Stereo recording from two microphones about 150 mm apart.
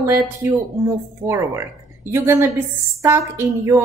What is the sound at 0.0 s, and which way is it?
A woman's voice, 20° right (ahead or behind).